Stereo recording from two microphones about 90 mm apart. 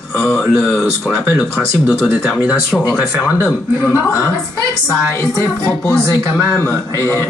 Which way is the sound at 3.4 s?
30° left (ahead or behind).